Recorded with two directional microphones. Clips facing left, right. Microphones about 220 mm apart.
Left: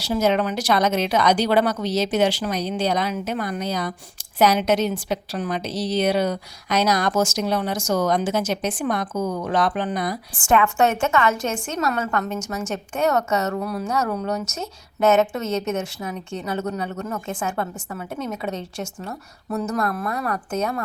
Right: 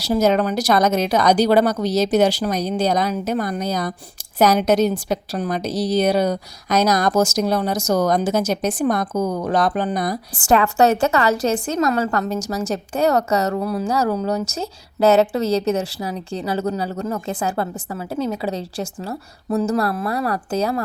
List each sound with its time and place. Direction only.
0.0 s a woman's voice: 40° right (ahead or behind)